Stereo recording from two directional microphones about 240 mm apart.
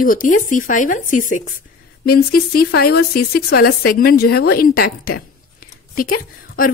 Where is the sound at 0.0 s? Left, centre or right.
Left.